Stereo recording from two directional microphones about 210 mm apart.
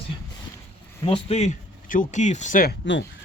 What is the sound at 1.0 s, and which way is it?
Speech, 30° left (ahead or behind).